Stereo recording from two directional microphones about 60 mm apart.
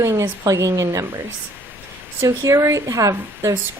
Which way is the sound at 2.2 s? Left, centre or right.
Right.